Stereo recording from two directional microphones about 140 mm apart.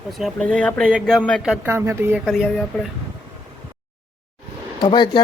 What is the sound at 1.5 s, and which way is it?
Speech, 15° right (ahead or behind).